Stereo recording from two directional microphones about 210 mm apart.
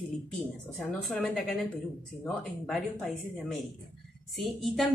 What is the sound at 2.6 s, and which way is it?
A woman's voice, centre (ahead or behind).